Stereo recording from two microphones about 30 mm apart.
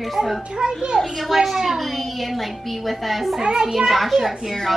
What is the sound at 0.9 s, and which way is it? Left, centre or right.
A woman's voice, centre.